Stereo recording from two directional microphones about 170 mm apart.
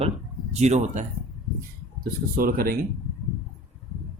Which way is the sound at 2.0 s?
55° right (ahead or behind).